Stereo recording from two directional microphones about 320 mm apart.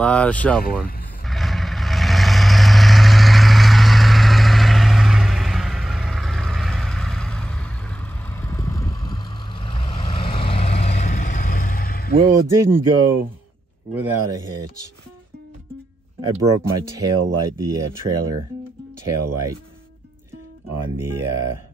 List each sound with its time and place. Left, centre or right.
0.0 s speech: centre
1.2 s vehicle: centre; by 12.1 s left
12.3 s speech: centre
16.3 s speech: centre
20.7 s speech: centre